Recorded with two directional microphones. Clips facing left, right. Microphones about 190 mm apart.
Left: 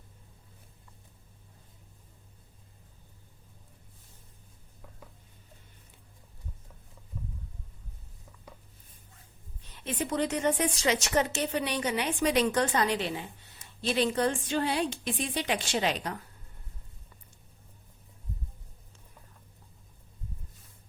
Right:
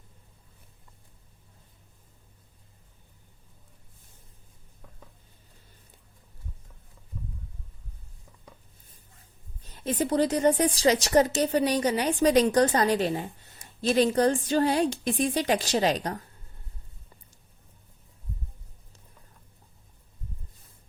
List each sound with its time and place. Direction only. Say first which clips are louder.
9.6 s a woman's voice: right 6 dB; 40° right (ahead or behind)